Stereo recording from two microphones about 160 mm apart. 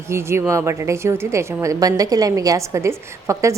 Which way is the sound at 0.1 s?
15° right (ahead or behind).